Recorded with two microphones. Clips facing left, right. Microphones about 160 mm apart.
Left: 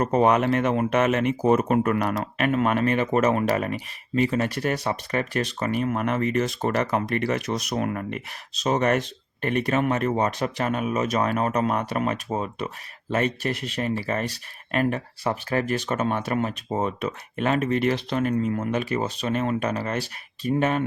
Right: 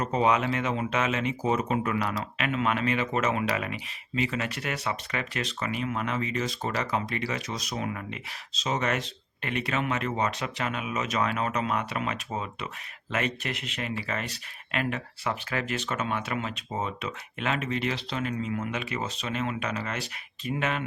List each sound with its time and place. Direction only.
0.0 s speech: 55° left (ahead or behind)